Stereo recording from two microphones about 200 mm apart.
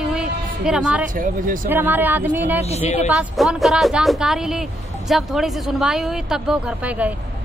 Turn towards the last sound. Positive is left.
turn(degrees=-5)  # may be behind; listen again after turning